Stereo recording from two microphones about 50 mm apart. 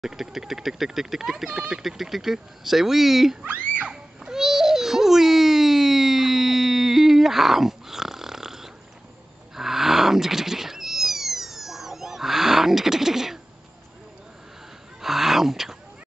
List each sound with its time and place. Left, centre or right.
0.0 s speech: centre
3.4 s speech: right
3.9 s babbling: centre
9.6 s cat: centre
15.0 s a sound: centre